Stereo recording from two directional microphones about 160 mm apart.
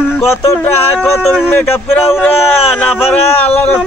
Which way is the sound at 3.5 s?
15° left (ahead or behind).